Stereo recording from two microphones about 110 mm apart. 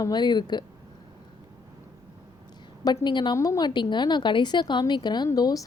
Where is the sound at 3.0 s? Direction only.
40° left (ahead or behind).